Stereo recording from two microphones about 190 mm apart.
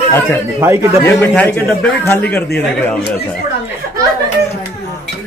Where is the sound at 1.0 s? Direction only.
10° left (ahead or behind).